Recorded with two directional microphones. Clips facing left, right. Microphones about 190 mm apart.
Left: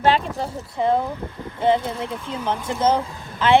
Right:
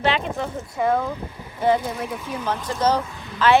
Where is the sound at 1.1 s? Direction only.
15° right (ahead or behind).